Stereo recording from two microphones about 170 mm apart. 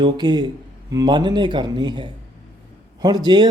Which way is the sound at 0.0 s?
25° right (ahead or behind).